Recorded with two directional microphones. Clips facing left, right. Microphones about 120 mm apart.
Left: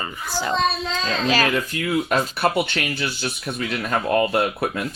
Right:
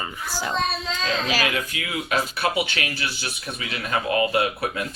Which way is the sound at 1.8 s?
50° left (ahead or behind).